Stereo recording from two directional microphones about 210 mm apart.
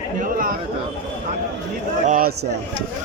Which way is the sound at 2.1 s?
45° right (ahead or behind).